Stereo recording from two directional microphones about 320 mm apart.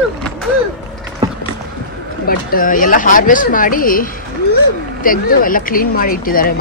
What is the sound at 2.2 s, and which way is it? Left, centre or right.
Speech, left.